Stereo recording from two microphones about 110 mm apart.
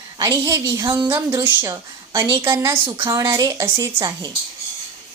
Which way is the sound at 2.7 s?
50° right (ahead or behind).